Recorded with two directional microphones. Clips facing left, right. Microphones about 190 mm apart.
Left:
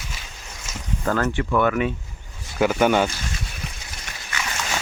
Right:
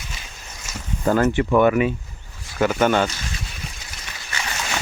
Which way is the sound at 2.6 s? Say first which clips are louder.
Even; 5° left (ahead or behind).